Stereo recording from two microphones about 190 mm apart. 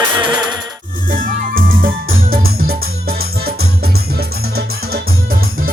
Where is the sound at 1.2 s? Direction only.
45° right (ahead or behind).